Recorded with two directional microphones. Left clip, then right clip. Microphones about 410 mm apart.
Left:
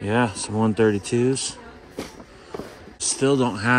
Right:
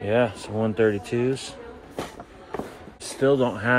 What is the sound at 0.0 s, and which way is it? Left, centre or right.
Speech, centre.